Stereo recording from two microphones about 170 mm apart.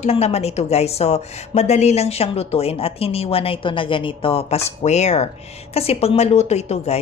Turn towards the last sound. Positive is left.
turn(degrees=40)  # may be behind; listen again after turning